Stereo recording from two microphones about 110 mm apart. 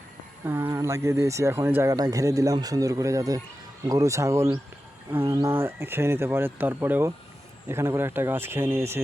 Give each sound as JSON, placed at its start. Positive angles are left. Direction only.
{"t": 0.4, "sound": "speech", "side_deg": -20}